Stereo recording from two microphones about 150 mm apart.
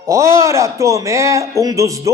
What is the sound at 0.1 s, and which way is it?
A man's voice, 20° right (ahead or behind).